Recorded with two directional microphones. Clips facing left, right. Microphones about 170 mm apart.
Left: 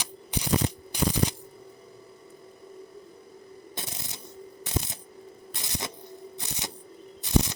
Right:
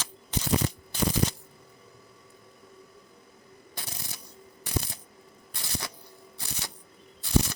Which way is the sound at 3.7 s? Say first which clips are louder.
Left 1 dB; 20° left (ahead or behind).